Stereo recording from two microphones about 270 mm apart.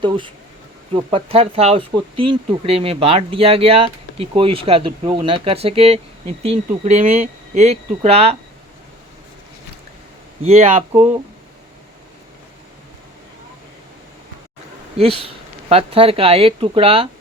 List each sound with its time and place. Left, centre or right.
0.0 s speech: centre
10.4 s speech: right
14.9 s speech: right